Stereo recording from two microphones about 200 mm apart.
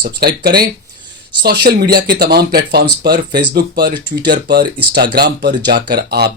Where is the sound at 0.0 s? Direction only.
50° right (ahead or behind).